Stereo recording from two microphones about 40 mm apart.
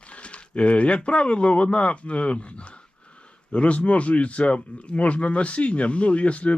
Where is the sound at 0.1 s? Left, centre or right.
Left.